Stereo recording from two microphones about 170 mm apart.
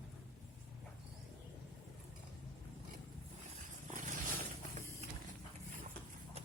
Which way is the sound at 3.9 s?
50° right (ahead or behind).